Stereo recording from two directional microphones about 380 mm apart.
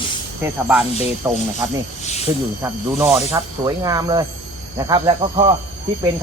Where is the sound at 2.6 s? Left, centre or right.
Centre.